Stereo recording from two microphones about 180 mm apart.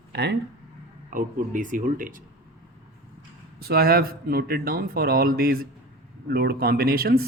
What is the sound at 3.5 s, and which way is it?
Speech, 60° right (ahead or behind).